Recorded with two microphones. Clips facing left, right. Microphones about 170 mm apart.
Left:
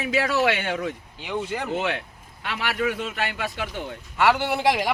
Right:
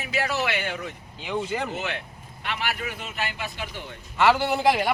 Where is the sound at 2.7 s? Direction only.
70° left (ahead or behind).